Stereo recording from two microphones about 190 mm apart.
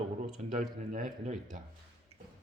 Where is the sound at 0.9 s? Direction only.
45° right (ahead or behind).